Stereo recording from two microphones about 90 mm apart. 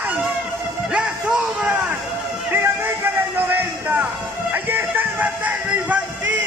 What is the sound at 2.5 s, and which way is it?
Music, 25° right (ahead or behind).